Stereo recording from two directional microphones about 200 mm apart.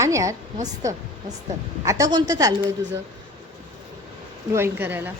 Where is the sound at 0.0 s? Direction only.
15° right (ahead or behind).